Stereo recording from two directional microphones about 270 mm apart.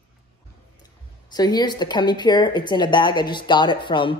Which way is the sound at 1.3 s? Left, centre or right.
Centre.